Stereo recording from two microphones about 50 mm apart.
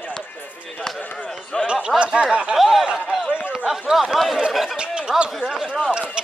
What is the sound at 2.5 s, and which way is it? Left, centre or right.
Snicker, centre.